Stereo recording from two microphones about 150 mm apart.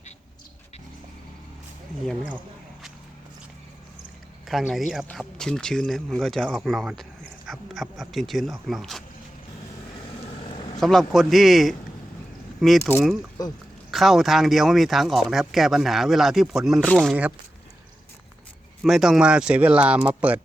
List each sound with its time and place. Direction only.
4.4 s speech: centre (ahead or behind)
10.8 s speech: centre (ahead or behind)
13.4 s speech: 25° left (ahead or behind)
13.9 s speech: centre (ahead or behind)
18.8 s speech: centre (ahead or behind)